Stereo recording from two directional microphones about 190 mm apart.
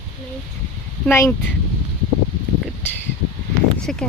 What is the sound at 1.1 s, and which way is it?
Speech, 15° left (ahead or behind).